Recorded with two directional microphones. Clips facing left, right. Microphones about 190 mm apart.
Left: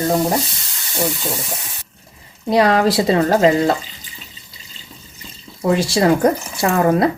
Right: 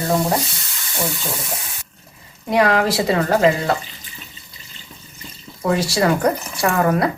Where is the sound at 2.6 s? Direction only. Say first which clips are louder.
Left 2 dB; 30° left (ahead or behind).